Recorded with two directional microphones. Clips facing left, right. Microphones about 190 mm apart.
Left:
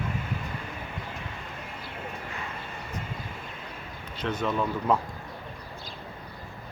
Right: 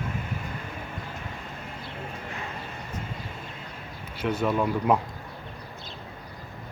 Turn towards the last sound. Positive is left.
turn(degrees=-15)  # may be behind; listen again after turning